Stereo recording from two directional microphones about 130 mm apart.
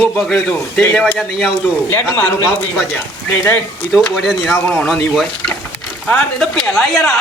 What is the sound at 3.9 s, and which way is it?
A woman's voice, centre (ahead or behind).